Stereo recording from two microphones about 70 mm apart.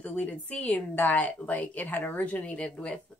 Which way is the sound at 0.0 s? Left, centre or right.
Left.